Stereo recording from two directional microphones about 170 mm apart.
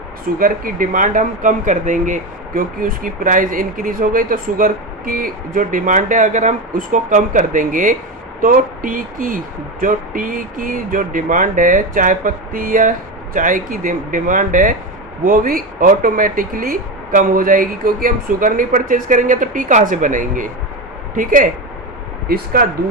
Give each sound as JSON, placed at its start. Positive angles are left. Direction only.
{"t": 0.3, "sound": "speech", "side_deg": -55}